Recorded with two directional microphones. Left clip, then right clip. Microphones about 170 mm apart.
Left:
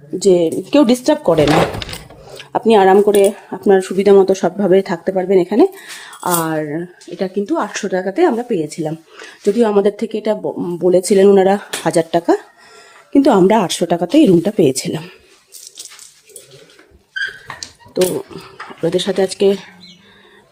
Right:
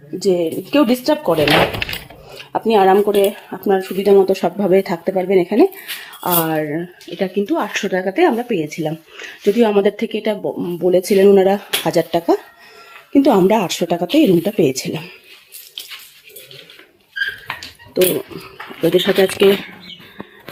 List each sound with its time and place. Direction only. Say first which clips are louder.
0.3 s speech: left 4 dB; 20° left (ahead or behind)
2.4 s speech: left 3 dB; 20° left (ahead or behind)
17.9 s speech: right 1 dB; centre (ahead or behind)